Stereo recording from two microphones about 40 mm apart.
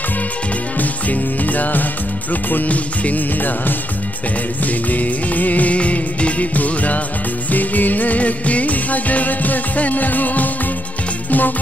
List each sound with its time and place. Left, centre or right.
0.7 s music: left
4.9 s music: left